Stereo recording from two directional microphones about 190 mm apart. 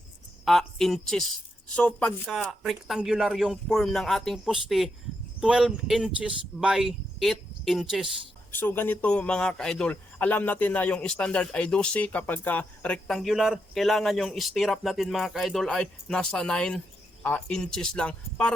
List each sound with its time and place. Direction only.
0.4 s a man's voice: centre (ahead or behind)
8.5 s a man's voice: 10° left (ahead or behind)